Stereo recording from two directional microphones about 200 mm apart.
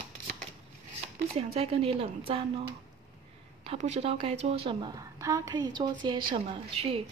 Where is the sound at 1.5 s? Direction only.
30° right (ahead or behind).